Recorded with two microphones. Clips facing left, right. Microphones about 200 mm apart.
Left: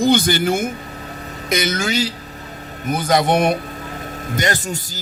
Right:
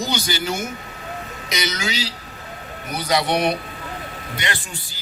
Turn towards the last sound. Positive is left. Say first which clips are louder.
# left 7 dB
turn(degrees=45)  # may be behind; listen again after turning